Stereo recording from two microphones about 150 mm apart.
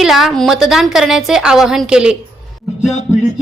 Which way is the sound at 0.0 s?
Centre (ahead or behind).